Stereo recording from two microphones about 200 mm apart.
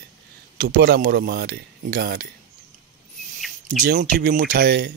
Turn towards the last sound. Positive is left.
turn(degrees=-50)  # may be behind; listen again after turning